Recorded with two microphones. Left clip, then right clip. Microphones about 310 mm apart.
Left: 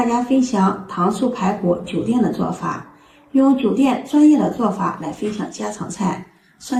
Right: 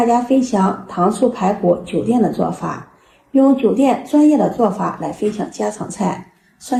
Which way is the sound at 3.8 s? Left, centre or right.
Centre.